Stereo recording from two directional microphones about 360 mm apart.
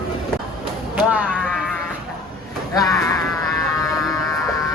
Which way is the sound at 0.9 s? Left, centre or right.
Centre.